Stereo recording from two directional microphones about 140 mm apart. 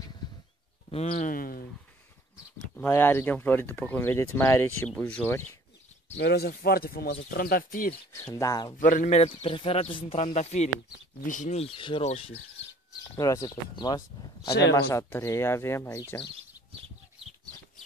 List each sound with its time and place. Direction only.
1.1 s speech: 85° left
2.7 s speech: 15° left (ahead or behind)
6.6 s speech: 90° left
8.1 s speech: 25° left (ahead or behind)
8.7 s a man's voice: 75° left (ahead or behind); by 12.4 s 45° left (ahead or behind)
13.2 s speech: 25° left (ahead or behind)
14.9 s speech: 15° left (ahead or behind)